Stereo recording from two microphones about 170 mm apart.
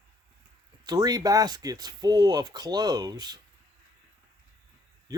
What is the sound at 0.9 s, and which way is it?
Speech, 25° right (ahead or behind).